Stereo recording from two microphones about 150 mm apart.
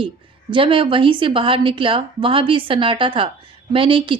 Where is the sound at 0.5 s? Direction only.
35° right (ahead or behind).